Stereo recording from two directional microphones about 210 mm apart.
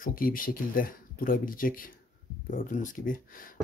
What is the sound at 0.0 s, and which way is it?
Speech, 45° left (ahead or behind).